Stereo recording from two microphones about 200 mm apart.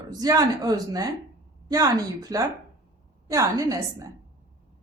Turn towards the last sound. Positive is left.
turn(degrees=-15)  # may be behind; listen again after turning